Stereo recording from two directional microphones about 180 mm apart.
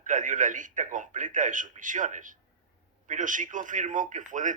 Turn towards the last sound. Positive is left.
turn(degrees=-45)  # may be behind; listen again after turning